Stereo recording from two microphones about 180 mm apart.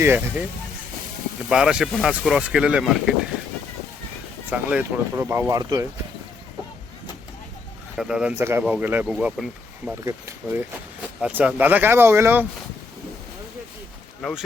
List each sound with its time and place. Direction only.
0.0 s speech: 10° right (ahead or behind)
1.5 s speech: 5° right (ahead or behind)
4.5 s speech: 10° right (ahead or behind)
7.9 s speech: 5° right (ahead or behind)
10.0 s speech: 15° right (ahead or behind)
14.2 s speech: centre (ahead or behind)